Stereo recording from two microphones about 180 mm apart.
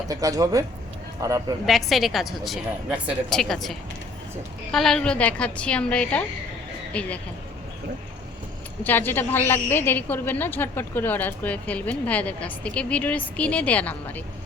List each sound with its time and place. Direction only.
0.1 s speech: 20° right (ahead or behind)
1.6 s a woman's voice: centre (ahead or behind)
8.8 s a woman's voice: 10° left (ahead or behind)